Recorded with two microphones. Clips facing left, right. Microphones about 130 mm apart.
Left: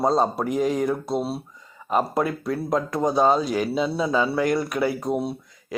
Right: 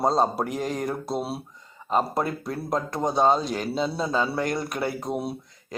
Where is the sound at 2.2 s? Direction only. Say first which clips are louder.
Left 4 dB; 30° right (ahead or behind).